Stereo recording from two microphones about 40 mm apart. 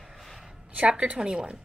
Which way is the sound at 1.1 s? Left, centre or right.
Right.